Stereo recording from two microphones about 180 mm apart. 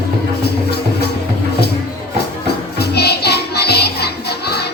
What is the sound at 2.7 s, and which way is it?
Music, 65° left (ahead or behind).